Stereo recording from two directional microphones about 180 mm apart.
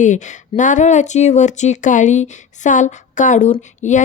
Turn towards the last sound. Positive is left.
turn(degrees=40)  # may be behind; listen again after turning